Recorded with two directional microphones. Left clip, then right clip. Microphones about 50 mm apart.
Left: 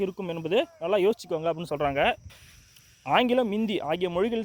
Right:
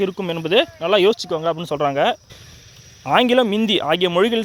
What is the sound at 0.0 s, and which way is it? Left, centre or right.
Speech, centre.